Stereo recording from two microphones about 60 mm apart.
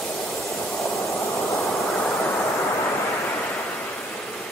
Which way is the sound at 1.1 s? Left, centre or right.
Left.